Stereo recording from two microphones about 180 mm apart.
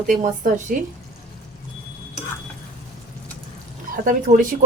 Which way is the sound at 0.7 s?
50° right (ahead or behind).